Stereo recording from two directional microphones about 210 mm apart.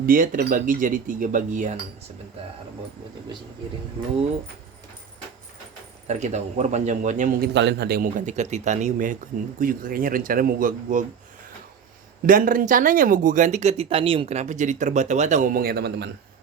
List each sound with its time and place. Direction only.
0.0 s speech: 40° right (ahead or behind)
6.1 s speech: 35° right (ahead or behind)
7.5 s speech: 55° right (ahead or behind); by 11.0 s 40° right (ahead or behind)
12.2 s speech: 40° right (ahead or behind)